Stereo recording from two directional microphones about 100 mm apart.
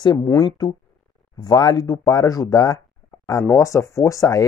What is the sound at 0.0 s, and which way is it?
Speech, 45° left (ahead or behind).